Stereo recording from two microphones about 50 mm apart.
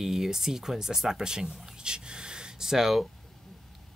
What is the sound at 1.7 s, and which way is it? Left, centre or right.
Speech, centre.